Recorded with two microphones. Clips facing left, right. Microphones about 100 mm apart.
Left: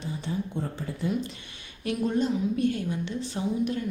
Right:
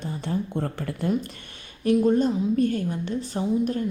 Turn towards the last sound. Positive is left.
turn(degrees=-40)  # may be behind; listen again after turning